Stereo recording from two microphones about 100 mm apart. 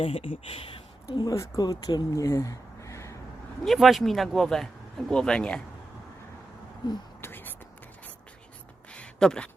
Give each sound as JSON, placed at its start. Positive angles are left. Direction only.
{"t": 0.0, "sound": "speech", "side_deg": 70}
{"t": 1.1, "sound": "speech", "side_deg": 45}
{"t": 2.1, "sound": "a sound", "side_deg": 30}
{"t": 3.6, "sound": "speech", "side_deg": 0}
{"t": 7.2, "sound": "whispering", "side_deg": 20}
{"t": 8.9, "sound": "a sound", "side_deg": 10}